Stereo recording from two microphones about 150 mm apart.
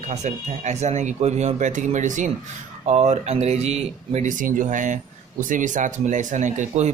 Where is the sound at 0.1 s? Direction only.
50° right (ahead or behind).